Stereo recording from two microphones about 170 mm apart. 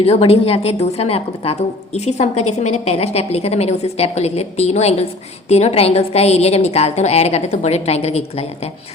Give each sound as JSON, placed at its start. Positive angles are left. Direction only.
{"t": 0.0, "sound": "a woman's voice", "side_deg": 35}